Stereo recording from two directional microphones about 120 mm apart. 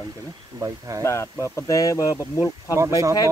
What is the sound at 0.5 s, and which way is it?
Speech, 25° right (ahead or behind).